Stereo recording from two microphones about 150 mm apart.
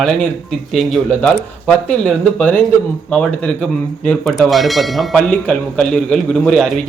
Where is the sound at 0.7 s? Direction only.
Centre (ahead or behind).